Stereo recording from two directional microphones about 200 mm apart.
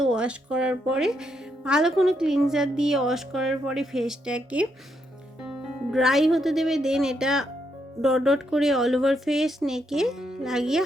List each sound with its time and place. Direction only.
0.0 s speech: 5° right (ahead or behind)